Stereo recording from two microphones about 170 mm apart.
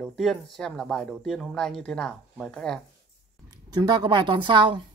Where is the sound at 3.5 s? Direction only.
25° right (ahead or behind).